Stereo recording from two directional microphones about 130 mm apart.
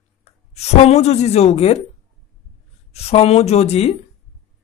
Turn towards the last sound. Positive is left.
turn(degrees=55)  # may be behind; listen again after turning